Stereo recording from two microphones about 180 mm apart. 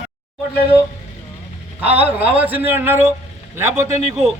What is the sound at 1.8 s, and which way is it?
Speech, 30° right (ahead or behind).